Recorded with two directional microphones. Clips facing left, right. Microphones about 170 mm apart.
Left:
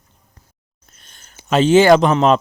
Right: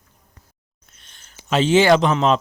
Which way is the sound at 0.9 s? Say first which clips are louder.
Left 3 dB; 45° left (ahead or behind).